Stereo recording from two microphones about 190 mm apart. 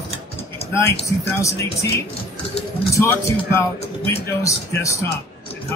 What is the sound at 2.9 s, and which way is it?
A man's voice, 15° left (ahead or behind).